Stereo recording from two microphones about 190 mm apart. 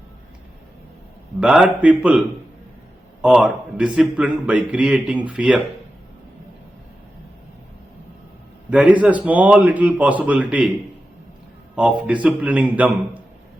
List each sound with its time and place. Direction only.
1.4 s a man's voice: 5° right (ahead or behind)
8.7 s speech: 5° right (ahead or behind)
11.8 s speech: 5° right (ahead or behind)